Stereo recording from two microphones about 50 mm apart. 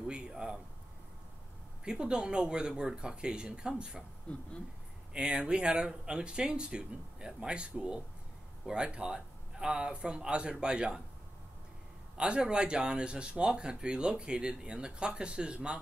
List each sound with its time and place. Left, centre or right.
0.1 s speech: centre
1.9 s speech: centre
4.3 s speech: left
5.1 s speech: centre
12.2 s speech: centre